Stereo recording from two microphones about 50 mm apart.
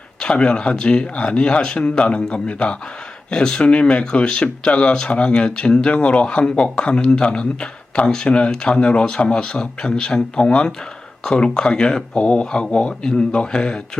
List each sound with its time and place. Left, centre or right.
0.2 s speech: centre